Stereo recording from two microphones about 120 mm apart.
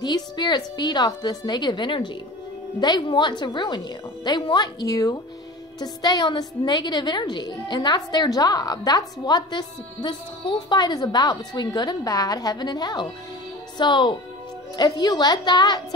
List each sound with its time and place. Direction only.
0.0 s a woman's voice: 35° left (ahead or behind)
10.7 s a woman's voice: 35° left (ahead or behind)